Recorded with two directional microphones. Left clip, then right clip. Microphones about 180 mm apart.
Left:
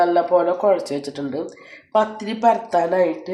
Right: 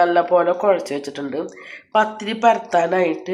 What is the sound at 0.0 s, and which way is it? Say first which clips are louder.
Speech: right 1 dB; 10° left (ahead or behind).